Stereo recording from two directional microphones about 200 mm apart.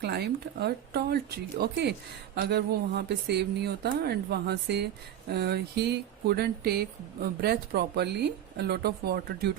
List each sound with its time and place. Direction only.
0.0 s speech: 55° right (ahead or behind)